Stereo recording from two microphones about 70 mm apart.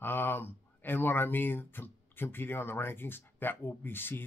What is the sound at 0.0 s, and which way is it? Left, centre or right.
Speech, left.